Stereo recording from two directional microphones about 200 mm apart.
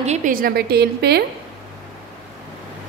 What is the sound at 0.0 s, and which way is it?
A woman's voice, 35° right (ahead or behind).